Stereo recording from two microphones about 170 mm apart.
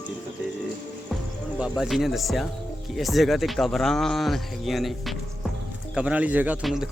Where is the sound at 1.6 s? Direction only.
Centre (ahead or behind).